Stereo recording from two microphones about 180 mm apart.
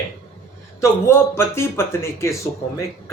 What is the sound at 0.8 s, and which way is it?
A man's voice, 15° left (ahead or behind).